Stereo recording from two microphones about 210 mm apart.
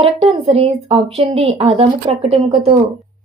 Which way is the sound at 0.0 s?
30° right (ahead or behind).